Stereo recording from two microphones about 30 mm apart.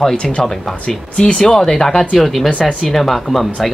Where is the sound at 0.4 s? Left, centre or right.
Centre.